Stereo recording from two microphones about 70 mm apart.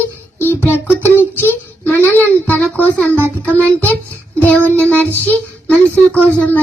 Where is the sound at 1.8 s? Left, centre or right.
Left.